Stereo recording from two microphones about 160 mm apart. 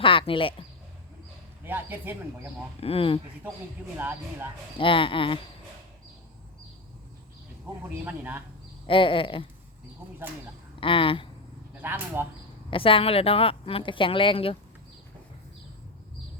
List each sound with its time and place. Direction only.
0.0 s speech: 30° left (ahead or behind)
1.6 s speech: 10° right (ahead or behind)
2.8 s a woman's voice: 35° left (ahead or behind)
3.9 s speech: 10° right (ahead or behind)
4.8 s a woman's voice: 30° left (ahead or behind)
8.0 s speech: 10° right (ahead or behind)
8.9 s a woman's voice: 30° left (ahead or behind)
10.8 s a woman's voice: 35° left (ahead or behind)
11.8 s speech: 15° right (ahead or behind)
12.7 s a woman's voice: 35° left (ahead or behind)